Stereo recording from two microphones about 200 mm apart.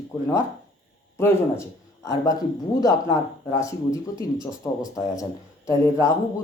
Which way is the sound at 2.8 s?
15° left (ahead or behind).